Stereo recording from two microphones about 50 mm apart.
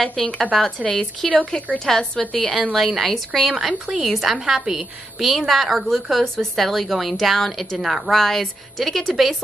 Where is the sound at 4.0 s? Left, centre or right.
Centre.